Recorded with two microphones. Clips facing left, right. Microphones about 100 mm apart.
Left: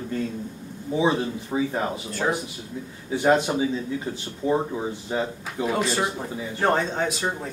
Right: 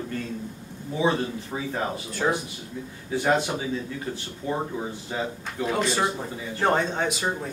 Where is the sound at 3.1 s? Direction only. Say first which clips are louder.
Left 3 dB; 15° left (ahead or behind).